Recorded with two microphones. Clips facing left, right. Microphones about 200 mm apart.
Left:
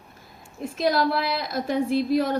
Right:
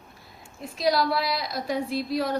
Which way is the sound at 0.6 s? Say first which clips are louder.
Left 2 dB; 50° left (ahead or behind).